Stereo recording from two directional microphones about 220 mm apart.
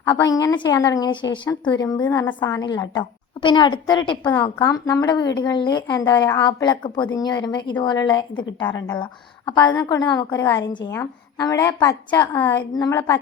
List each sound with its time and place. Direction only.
0.2 s a woman's voice: 15° left (ahead or behind)